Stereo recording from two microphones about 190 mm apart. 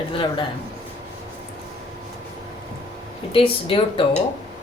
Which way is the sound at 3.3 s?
30° left (ahead or behind).